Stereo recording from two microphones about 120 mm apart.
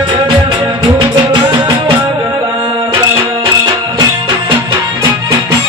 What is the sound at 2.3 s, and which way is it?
Music, 40° right (ahead or behind).